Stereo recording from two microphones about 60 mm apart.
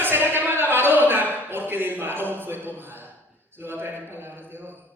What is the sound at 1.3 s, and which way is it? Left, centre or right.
A man's voice, right.